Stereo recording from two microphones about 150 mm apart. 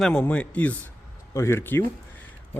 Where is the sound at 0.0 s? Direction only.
5° left (ahead or behind).